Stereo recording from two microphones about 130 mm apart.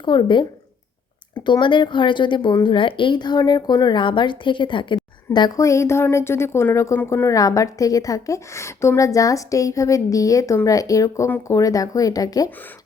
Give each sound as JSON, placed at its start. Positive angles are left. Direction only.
{"t": 0.0, "sound": "a woman's voice", "side_deg": 35}
{"t": 1.5, "sound": "a woman's voice", "side_deg": 35}